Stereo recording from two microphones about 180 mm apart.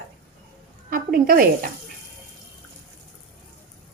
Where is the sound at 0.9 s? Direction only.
55° right (ahead or behind).